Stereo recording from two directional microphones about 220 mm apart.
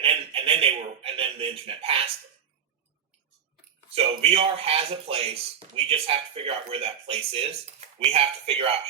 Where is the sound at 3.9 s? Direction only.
25° right (ahead or behind).